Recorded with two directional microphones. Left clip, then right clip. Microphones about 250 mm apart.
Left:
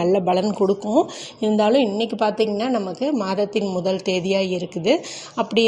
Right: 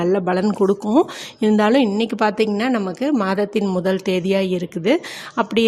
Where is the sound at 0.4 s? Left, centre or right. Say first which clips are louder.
Right 2 dB; right.